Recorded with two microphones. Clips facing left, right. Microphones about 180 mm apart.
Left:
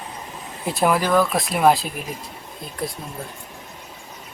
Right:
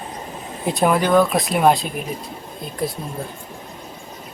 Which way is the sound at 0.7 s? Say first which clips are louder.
Right 2 dB; centre (ahead or behind).